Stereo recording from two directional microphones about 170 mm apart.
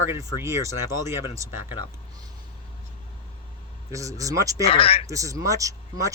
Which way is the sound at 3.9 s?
20° right (ahead or behind).